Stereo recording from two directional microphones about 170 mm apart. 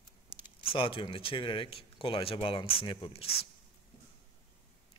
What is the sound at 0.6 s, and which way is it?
A man's voice, 35° left (ahead or behind).